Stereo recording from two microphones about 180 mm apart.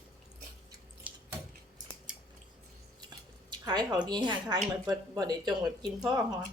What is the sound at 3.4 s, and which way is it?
A woman's voice, 25° right (ahead or behind).